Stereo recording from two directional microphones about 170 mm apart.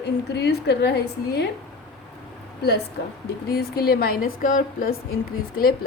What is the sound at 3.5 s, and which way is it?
A woman's voice, 65° left (ahead or behind).